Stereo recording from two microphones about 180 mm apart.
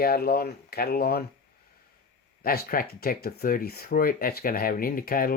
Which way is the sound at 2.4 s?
55° left (ahead or behind).